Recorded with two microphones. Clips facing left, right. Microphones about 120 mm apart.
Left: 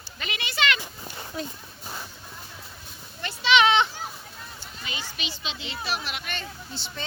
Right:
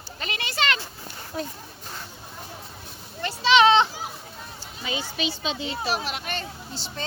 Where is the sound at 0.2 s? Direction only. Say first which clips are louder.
Right 1 dB; 40° right (ahead or behind).